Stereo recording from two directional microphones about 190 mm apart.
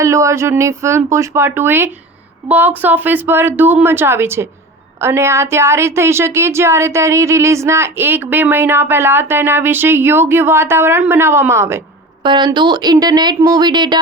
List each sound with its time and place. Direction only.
0.0 s a woman's voice: 15° right (ahead or behind)